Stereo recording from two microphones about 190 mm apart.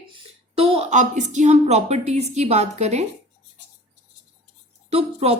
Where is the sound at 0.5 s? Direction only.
30° right (ahead or behind).